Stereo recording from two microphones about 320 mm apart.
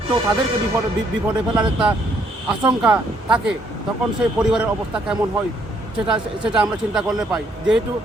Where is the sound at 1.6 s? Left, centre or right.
Centre.